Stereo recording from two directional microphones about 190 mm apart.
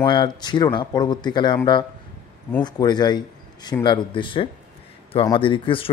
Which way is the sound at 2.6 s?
20° left (ahead or behind).